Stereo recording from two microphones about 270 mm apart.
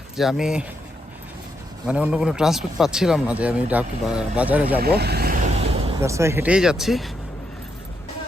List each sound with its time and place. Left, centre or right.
0.2 s speech: centre
1.9 s speech: centre
4.8 s vehicle: right
6.0 s speech: centre